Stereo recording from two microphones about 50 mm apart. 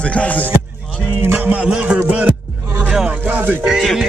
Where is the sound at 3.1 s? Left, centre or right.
Right.